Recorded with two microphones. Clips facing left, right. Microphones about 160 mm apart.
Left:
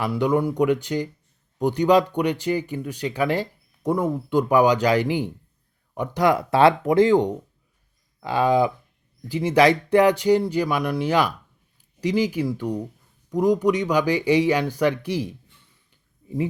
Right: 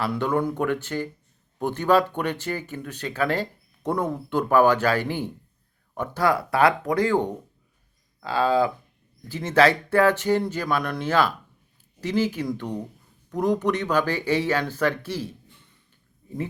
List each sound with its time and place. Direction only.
0.0 s speech: 15° left (ahead or behind)